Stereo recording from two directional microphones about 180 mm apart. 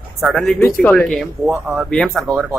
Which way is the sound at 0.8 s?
5° left (ahead or behind).